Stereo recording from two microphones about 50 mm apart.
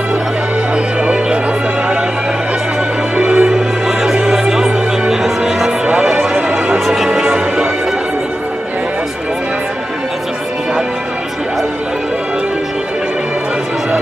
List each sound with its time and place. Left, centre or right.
1.0 s music: right
3.2 s music: centre
3.5 s music: centre
7.3 s music: right